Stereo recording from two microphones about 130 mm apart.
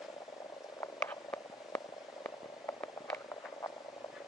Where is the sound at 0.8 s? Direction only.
20° left (ahead or behind).